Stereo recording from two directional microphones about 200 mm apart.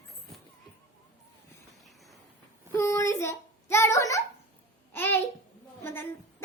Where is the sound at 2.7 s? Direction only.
15° left (ahead or behind).